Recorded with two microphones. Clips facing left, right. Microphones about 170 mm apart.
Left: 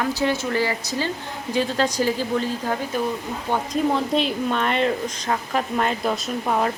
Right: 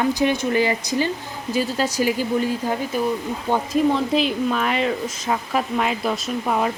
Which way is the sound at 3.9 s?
Centre (ahead or behind).